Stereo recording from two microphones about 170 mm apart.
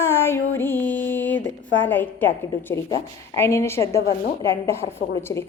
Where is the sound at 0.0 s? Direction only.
15° left (ahead or behind).